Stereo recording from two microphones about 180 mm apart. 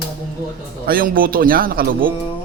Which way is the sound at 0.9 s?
55° right (ahead or behind).